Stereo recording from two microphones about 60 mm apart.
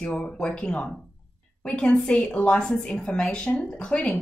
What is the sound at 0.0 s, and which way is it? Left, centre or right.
A woman's voice, centre.